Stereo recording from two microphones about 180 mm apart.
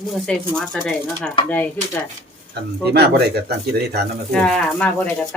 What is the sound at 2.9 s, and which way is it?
Speech, 65° right (ahead or behind).